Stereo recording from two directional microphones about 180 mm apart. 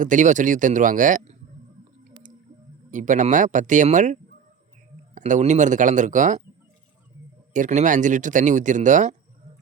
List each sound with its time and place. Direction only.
0.0 s speech: 45° right (ahead or behind)
2.9 s speech: 45° right (ahead or behind)
7.5 s speech: 45° right (ahead or behind)